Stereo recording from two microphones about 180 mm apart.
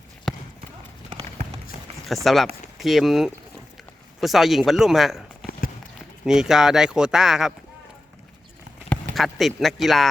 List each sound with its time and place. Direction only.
2.0 s speech: centre (ahead or behind)
5.5 s clip-clop: 55° left (ahead or behind)
6.2 s speech: 5° right (ahead or behind)
8.9 s speech: centre (ahead or behind)